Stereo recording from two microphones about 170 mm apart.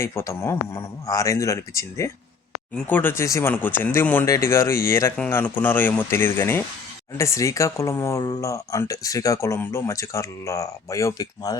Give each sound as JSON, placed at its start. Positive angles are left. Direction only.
{"t": 0.0, "sound": "speech", "side_deg": 15}